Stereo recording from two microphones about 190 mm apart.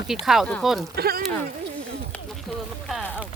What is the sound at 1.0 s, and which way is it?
Speech, 55° right (ahead or behind).